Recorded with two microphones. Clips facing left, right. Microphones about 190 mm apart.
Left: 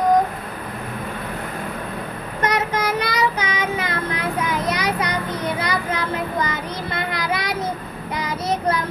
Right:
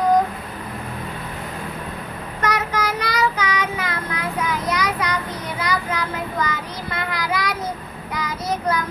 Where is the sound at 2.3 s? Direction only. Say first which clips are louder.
Left 1 dB; 20° left (ahead or behind).